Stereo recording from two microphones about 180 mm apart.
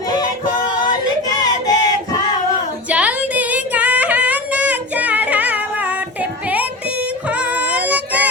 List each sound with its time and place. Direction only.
1.4 s a sound: 20° left (ahead or behind)
2.9 s female singing: 10° right (ahead or behind)
7.3 s child singing: 10° right (ahead or behind)